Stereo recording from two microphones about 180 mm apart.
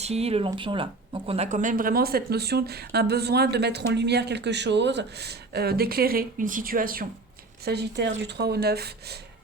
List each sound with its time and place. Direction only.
0.0 s speech: 35° right (ahead or behind); by 7.1 s 50° right (ahead or behind)
7.6 s speech: 65° right (ahead or behind)